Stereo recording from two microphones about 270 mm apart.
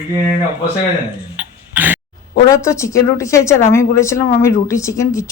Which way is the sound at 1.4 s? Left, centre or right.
Centre.